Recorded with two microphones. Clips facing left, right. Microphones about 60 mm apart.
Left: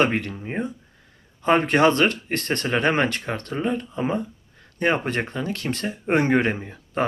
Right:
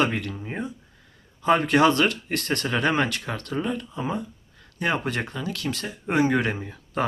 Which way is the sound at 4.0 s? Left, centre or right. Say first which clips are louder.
Left 4 dB; left.